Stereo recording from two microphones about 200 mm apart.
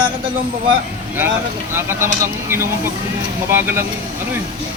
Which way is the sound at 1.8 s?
10° right (ahead or behind).